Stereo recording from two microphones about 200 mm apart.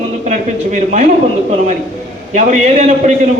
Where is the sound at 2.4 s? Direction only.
35° right (ahead or behind).